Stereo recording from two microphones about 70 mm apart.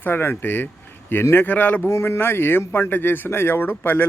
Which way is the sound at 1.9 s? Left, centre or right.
Left.